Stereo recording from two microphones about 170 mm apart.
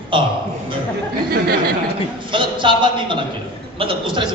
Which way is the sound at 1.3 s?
65° right (ahead or behind).